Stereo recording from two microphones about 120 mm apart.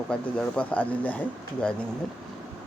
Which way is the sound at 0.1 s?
10° left (ahead or behind).